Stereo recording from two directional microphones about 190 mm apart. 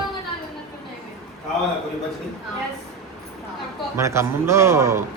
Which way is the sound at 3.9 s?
15° right (ahead or behind).